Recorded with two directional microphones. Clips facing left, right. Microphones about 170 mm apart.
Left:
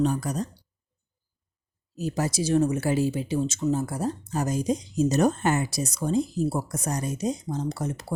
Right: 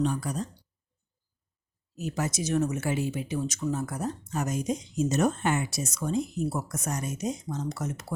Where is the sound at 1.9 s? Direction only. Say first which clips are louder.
Left 4 dB; 35° left (ahead or behind).